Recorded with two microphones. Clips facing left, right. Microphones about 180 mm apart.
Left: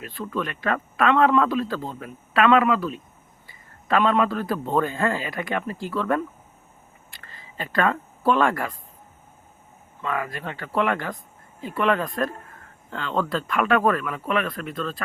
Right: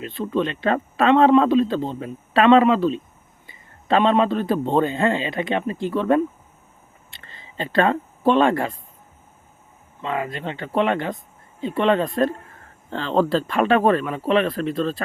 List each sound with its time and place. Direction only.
0.0 s speech: 25° right (ahead or behind)
7.1 s a sound: 25° right (ahead or behind)
10.0 s speech: 25° right (ahead or behind)